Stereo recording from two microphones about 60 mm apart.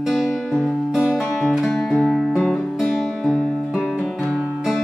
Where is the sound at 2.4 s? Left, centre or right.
Centre.